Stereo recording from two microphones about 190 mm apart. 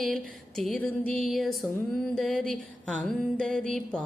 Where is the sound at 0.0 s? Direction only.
Centre (ahead or behind).